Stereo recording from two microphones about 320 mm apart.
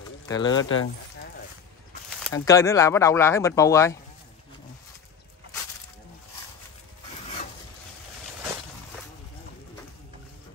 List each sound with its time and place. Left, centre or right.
0.3 s speech: centre
0.6 s speech: left
2.3 s speech: centre